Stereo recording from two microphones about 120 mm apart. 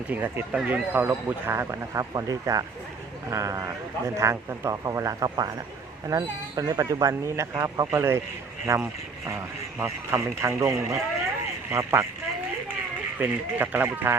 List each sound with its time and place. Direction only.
0.1 s a man's voice: 15° right (ahead or behind)
13.1 s speech: 15° right (ahead or behind)